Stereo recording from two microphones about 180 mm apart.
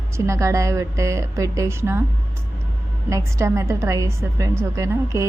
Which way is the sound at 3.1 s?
15° right (ahead or behind).